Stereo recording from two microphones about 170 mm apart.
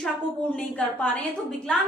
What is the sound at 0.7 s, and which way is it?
Speech, 10° left (ahead or behind).